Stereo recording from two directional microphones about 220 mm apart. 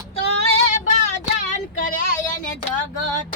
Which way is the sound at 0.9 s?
35° left (ahead or behind).